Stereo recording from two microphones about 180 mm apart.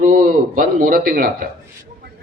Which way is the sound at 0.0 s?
45° right (ahead or behind).